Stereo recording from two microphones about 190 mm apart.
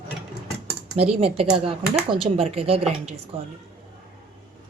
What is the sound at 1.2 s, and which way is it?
Speech, 30° right (ahead or behind).